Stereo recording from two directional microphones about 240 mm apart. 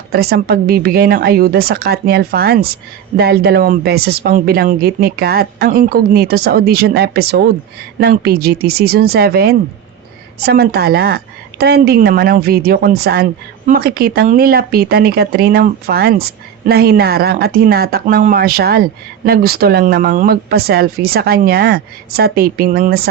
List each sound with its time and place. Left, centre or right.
0.1 s speech: right